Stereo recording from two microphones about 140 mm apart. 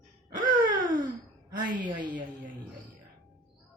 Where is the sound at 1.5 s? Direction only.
35° right (ahead or behind).